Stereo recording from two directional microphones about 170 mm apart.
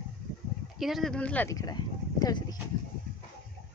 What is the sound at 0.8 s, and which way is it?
Speech, centre (ahead or behind).